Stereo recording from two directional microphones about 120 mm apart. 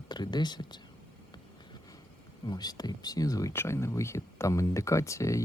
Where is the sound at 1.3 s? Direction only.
35° left (ahead or behind).